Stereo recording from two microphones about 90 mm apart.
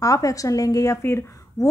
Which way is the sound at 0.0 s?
40° left (ahead or behind).